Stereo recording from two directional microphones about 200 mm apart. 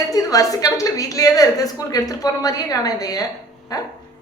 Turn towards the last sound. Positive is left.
turn(degrees=20)  # may be behind; listen again after turning